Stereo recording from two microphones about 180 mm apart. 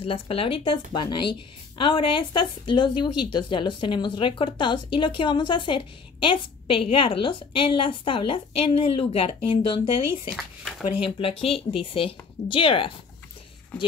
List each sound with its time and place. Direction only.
0.0 s speech: 30° left (ahead or behind)
10.3 s speech: centre (ahead or behind)
11.1 s speech: 30° left (ahead or behind)